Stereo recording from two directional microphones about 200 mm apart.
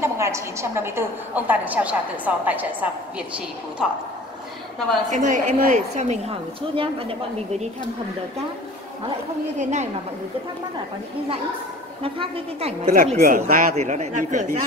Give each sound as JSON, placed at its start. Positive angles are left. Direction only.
{"t": 0.0, "sound": "a woman's voice", "side_deg": -15}
{"t": 5.1, "sound": "a woman's voice", "side_deg": -40}
{"t": 9.6, "sound": "a woman's voice", "side_deg": -35}
{"t": 12.0, "sound": "a woman's voice", "side_deg": -30}